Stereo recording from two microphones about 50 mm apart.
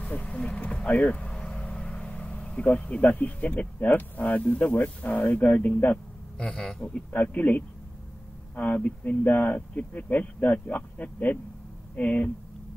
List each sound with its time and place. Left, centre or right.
0.1 s a sound: left
0.7 s speech: left
1.3 s vehicle: centre
2.4 s speech: left
6.3 s speech: centre
7.1 s speech: left